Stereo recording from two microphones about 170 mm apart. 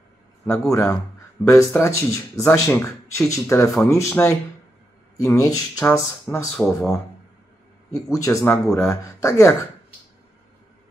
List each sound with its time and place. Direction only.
0.5 s speech: 15° left (ahead or behind)
6.5 s speech: 5° left (ahead or behind)
7.9 s speech: 20° left (ahead or behind)
8.5 s speech: 5° left (ahead or behind)
8.8 s speech: 20° left (ahead or behind)